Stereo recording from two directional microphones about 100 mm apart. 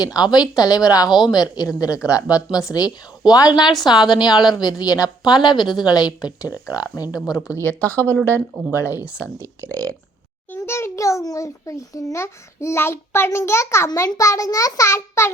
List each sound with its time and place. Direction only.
0.0 s a woman's voice: 40° left (ahead or behind)
7.6 s a child's voice: 15° left (ahead or behind)
9.0 s speech: 15° right (ahead or behind)
9.6 s speech: 10° left (ahead or behind)
10.5 s a child's voice: 25° left (ahead or behind)